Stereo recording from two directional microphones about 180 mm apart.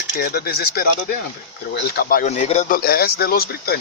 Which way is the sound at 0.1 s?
60° left (ahead or behind).